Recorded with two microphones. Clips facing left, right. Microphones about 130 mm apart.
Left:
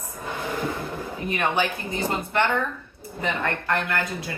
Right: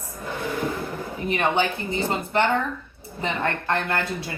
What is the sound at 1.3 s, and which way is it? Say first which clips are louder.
Speech: right 2 dB; 25° right (ahead or behind).